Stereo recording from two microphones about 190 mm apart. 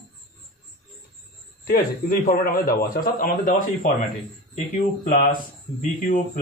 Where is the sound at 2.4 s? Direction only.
50° left (ahead or behind).